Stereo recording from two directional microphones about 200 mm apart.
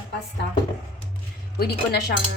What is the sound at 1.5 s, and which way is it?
Speech, 55° left (ahead or behind).